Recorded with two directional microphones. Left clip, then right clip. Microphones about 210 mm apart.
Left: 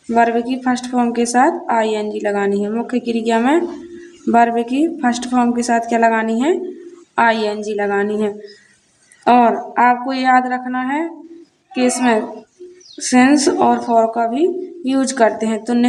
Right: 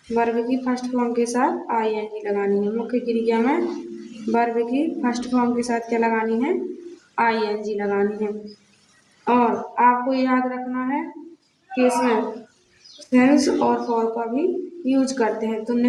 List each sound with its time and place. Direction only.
0.1 s a woman's voice: 50° left (ahead or behind)
4.9 s a woman's voice: 50° left (ahead or behind)